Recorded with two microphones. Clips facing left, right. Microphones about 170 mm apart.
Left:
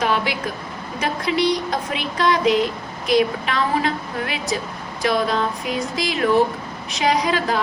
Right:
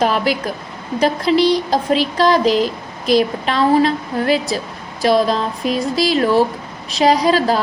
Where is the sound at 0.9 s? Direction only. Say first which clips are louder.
Right 7 dB; 35° right (ahead or behind).